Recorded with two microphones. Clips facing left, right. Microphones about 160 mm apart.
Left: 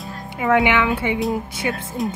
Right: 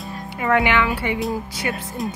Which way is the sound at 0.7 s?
20° left (ahead or behind).